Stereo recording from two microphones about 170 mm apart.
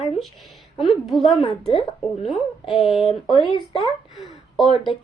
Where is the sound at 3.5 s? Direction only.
30° left (ahead or behind).